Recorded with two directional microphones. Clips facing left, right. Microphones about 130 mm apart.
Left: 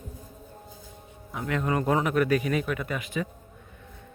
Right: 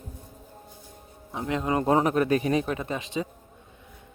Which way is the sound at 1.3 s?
25° right (ahead or behind).